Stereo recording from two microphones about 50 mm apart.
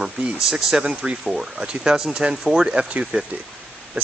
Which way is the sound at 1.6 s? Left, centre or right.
Centre.